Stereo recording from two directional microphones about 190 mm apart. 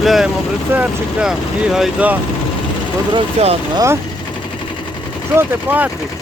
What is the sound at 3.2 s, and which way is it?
Speech, 30° right (ahead or behind).